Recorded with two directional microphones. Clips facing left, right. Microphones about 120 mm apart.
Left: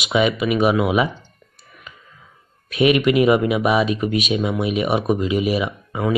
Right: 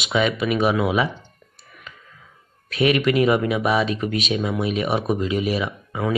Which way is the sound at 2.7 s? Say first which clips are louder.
Left 3 dB; 15° left (ahead or behind).